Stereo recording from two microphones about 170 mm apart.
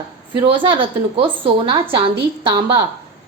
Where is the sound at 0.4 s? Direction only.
30° right (ahead or behind).